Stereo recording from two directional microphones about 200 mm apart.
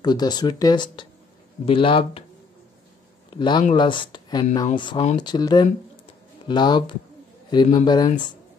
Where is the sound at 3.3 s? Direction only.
25° left (ahead or behind).